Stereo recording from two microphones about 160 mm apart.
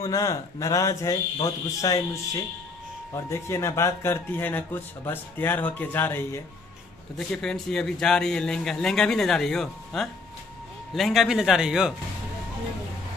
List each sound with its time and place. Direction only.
0.0 s speech: 20° left (ahead or behind)
7.2 s a man's voice: 5° left (ahead or behind)